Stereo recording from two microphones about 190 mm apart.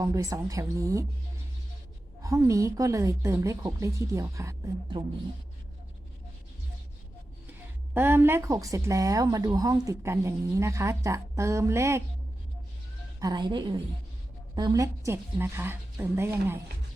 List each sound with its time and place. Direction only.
0.0 s a woman's voice: 15° right (ahead or behind)
2.2 s a woman's voice: 15° right (ahead or behind)
7.9 s a woman's voice: 10° right (ahead or behind)
13.1 s a woman's voice: 20° right (ahead or behind)